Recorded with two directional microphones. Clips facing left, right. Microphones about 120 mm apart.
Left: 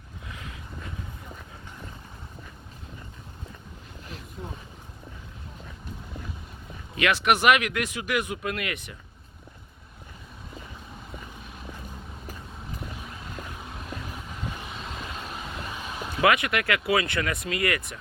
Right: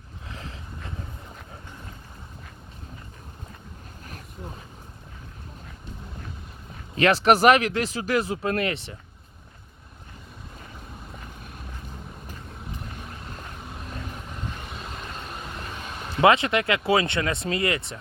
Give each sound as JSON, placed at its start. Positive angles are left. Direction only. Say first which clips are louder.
{"t": 6.9, "sound": "speech", "louder": "right 5 dB", "side_deg": -35}
{"t": 14.6, "sound": "vehicle", "louder": "even", "side_deg": 0}
{"t": 16.2, "sound": "speech", "louder": "right 4 dB", "side_deg": -25}